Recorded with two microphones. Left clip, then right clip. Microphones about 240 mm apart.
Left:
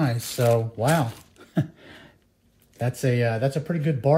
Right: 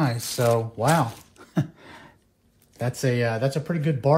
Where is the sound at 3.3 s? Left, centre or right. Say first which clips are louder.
Even; centre.